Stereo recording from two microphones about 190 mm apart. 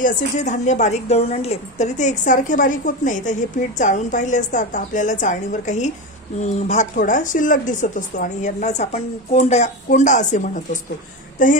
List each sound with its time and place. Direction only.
0.0 s a woman's voice: 40° left (ahead or behind)